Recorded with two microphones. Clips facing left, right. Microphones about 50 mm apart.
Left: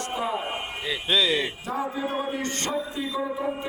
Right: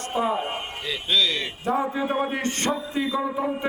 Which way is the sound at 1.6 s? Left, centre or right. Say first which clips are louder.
Right 4 dB; right.